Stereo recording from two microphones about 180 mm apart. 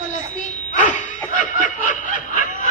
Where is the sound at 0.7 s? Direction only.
45° left (ahead or behind).